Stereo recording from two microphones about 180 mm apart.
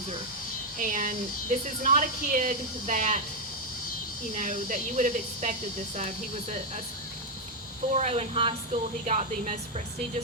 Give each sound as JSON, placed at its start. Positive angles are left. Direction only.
{"t": 0.8, "sound": "speech", "side_deg": -45}
{"t": 4.4, "sound": "a woman's voice", "side_deg": -45}
{"t": 7.9, "sound": "a woman's voice", "side_deg": -35}